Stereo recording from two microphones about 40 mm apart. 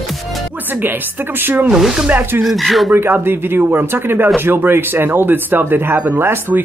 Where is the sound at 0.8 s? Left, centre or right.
Right.